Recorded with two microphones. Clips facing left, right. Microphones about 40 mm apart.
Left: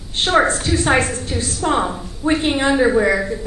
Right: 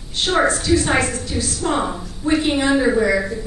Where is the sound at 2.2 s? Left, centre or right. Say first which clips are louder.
Left 1 dB; left.